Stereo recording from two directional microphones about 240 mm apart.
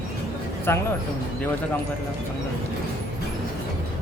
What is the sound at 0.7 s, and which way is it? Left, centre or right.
Speech, centre.